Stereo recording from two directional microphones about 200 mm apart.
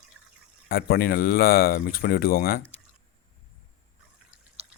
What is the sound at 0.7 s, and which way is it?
Speech, 50° left (ahead or behind).